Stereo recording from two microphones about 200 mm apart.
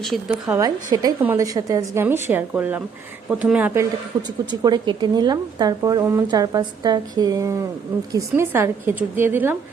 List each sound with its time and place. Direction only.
0.4 s a woman's voice: 20° right (ahead or behind)
4.6 s a woman's voice: 20° right (ahead or behind)